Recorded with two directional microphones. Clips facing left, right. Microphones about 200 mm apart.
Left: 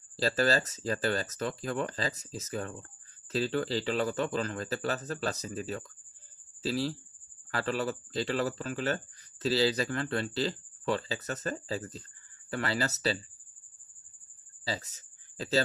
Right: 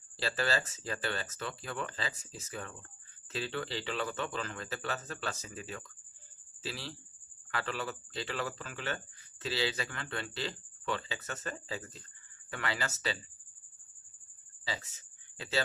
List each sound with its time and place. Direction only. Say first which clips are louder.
0.2 s speech: left 6 dB; 40° left (ahead or behind)
14.6 s speech: left 5 dB; 40° left (ahead or behind)